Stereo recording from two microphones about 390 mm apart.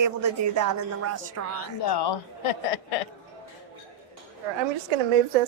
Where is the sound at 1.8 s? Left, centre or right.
Left.